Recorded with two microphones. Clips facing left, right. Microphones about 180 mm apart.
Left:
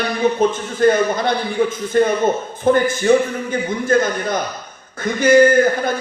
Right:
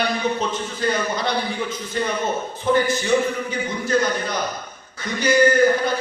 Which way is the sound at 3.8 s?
50° left (ahead or behind).